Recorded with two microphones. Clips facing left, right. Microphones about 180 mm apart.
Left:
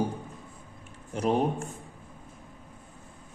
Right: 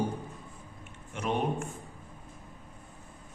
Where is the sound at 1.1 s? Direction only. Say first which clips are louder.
Left 4 dB; 35° left (ahead or behind).